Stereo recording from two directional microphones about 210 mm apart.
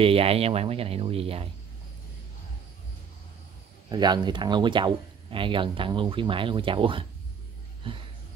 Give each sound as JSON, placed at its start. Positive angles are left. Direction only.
{"t": 0.0, "sound": "speech", "side_deg": -25}
{"t": 3.9, "sound": "speech", "side_deg": -20}